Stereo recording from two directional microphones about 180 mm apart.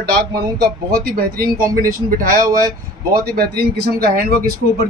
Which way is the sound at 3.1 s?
55° right (ahead or behind).